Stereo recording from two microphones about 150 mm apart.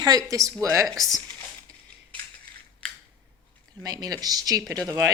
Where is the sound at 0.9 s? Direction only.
Centre (ahead or behind).